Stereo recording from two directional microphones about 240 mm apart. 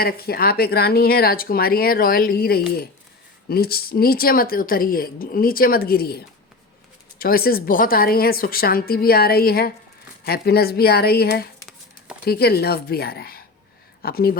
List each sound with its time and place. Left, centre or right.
0.0 s a woman's voice: left